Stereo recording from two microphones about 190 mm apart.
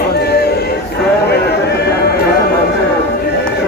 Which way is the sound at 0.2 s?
60° left (ahead or behind).